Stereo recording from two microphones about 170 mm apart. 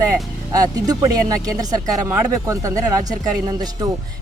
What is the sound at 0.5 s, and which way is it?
Speech, 20° right (ahead or behind).